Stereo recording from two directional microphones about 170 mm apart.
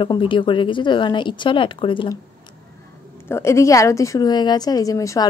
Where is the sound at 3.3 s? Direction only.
15° left (ahead or behind).